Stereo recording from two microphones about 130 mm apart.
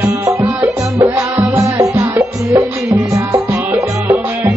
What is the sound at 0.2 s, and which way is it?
Music, 25° right (ahead or behind).